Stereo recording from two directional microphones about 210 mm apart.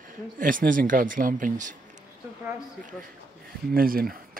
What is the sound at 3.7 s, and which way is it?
Speech, 45° right (ahead or behind).